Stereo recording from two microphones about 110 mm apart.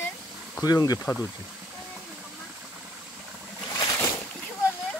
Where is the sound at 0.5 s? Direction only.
35° left (ahead or behind).